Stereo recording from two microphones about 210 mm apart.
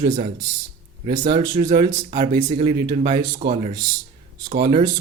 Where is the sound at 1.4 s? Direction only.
30° right (ahead or behind).